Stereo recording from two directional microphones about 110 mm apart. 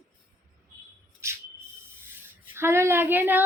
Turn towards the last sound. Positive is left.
turn(degrees=-20)  # may be behind; listen again after turning